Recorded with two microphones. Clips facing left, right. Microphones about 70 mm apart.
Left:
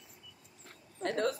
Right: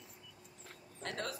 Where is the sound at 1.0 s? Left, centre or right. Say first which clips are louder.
Left 9 dB; left.